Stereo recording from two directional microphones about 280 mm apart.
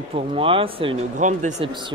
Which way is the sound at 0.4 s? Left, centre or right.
Centre.